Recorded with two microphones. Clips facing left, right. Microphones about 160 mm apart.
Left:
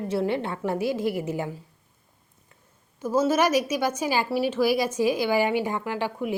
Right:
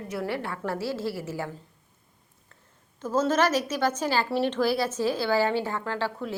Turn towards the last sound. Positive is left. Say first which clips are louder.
# left 2 dB
turn(degrees=15)  # may be behind; listen again after turning